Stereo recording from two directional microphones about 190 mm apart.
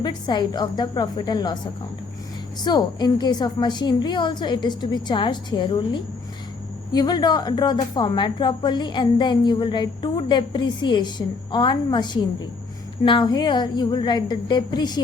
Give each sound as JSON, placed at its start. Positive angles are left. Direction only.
{"t": 0.0, "sound": "a woman's voice", "side_deg": 25}
{"t": 2.6, "sound": "a woman's voice", "side_deg": 20}